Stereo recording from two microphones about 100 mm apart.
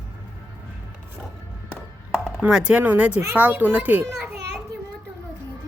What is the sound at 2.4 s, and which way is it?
Speech, 10° right (ahead or behind).